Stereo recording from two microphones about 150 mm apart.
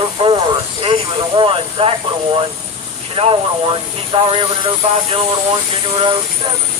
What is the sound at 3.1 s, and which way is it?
Speech, 40° right (ahead or behind).